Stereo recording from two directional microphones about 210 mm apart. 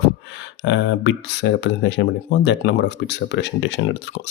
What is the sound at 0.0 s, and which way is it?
Speech, 55° left (ahead or behind).